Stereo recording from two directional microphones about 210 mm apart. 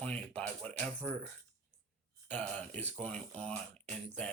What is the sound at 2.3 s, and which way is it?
Speech, 5° left (ahead or behind).